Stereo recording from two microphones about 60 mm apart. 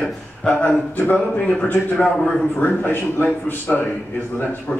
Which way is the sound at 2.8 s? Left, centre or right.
Left.